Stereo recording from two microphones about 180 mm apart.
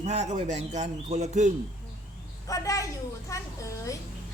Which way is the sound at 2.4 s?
20° left (ahead or behind).